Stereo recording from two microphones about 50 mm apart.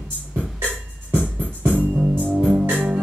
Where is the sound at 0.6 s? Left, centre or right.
Right.